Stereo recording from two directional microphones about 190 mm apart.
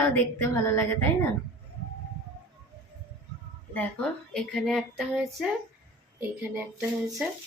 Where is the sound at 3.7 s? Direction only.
10° left (ahead or behind); by 7.3 s 10° right (ahead or behind).